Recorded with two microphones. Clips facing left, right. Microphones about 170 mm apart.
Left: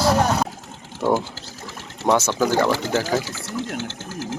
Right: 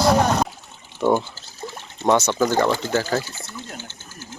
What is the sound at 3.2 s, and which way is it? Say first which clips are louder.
Sewing machine: left 8 dB; 90° left.